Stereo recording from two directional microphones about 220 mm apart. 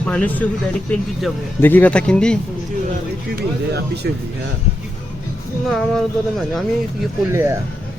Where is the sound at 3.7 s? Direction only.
50° right (ahead or behind).